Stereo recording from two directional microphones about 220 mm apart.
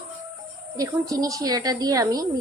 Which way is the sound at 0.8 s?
15° right (ahead or behind).